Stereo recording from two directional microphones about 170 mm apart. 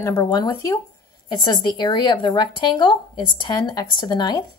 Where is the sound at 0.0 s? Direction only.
15° left (ahead or behind).